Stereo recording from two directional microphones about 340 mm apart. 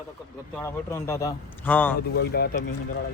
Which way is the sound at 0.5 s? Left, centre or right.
Centre.